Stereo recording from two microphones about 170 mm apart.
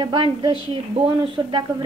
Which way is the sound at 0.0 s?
30° right (ahead or behind).